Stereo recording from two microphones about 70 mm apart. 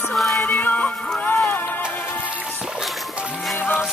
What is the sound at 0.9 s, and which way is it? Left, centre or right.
Music, centre.